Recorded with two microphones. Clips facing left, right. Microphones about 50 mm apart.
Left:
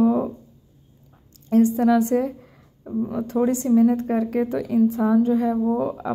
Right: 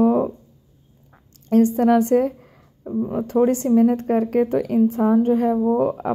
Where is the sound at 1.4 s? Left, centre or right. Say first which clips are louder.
Right 1 dB; right.